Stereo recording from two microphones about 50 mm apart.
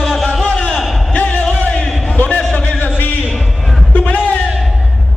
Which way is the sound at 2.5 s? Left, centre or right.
Left.